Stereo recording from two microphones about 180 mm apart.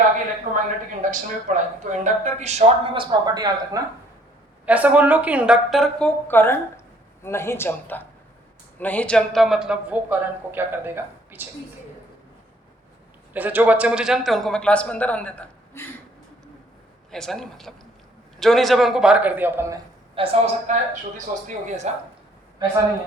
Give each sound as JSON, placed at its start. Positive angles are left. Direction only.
{"t": 0.5, "sound": "speech", "side_deg": -45}
{"t": 4.6, "sound": "speech", "side_deg": -10}
{"t": 13.3, "sound": "speech", "side_deg": -10}
{"t": 17.1, "sound": "speech", "side_deg": 5}
{"t": 20.1, "sound": "a woman's voice", "side_deg": -35}